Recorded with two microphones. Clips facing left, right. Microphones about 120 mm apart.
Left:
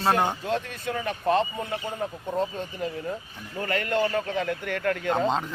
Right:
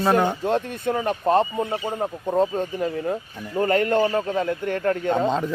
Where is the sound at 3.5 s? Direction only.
35° right (ahead or behind).